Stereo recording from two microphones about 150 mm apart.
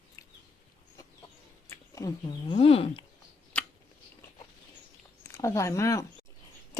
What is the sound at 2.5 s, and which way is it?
Speech, 40° left (ahead or behind).